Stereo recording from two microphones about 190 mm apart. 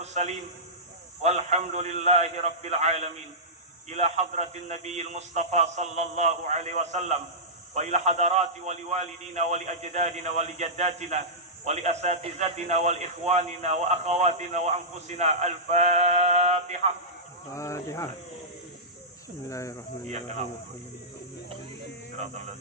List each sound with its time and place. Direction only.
0.0 s a sound: 35° right (ahead or behind)
1.2 s a man's voice: 35° right (ahead or behind)
17.5 s speech: 15° left (ahead or behind)
19.5 s speech: 15° left (ahead or behind)
20.1 s a man's voice: 40° right (ahead or behind)
22.2 s a man's voice: 35° right (ahead or behind)